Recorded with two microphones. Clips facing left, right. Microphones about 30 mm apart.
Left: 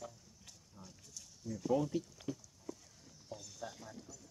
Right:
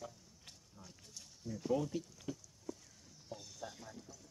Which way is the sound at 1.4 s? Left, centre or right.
Centre.